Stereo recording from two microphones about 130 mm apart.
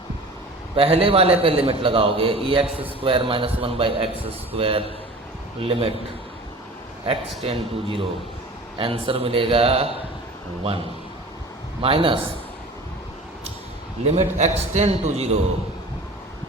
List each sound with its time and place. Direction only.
0.8 s a man's voice: 45° right (ahead or behind)
7.0 s a man's voice: 45° right (ahead or behind)
11.8 s a man's voice: 45° right (ahead or behind)
14.1 s a man's voice: 65° right (ahead or behind)